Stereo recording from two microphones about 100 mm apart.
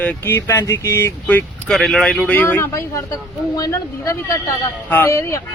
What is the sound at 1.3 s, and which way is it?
Speech, 15° left (ahead or behind).